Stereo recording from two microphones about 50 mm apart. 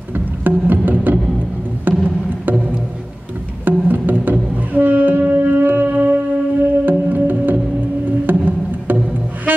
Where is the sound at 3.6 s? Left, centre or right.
Right.